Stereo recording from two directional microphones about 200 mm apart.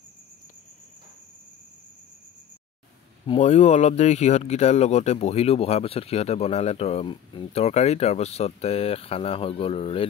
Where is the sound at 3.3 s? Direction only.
35° left (ahead or behind).